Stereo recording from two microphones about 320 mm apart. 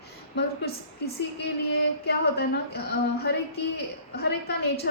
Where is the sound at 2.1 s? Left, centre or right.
Left.